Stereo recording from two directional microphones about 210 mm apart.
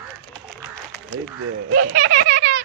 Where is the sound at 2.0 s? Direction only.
65° right (ahead or behind).